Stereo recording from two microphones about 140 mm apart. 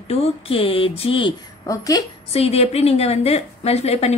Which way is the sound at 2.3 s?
45° left (ahead or behind).